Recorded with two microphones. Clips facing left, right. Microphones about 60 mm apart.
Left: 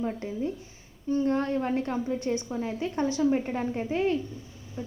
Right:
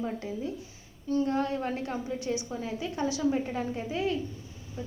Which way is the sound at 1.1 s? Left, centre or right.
Left.